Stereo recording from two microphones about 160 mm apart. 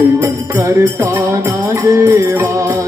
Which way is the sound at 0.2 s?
15° right (ahead or behind).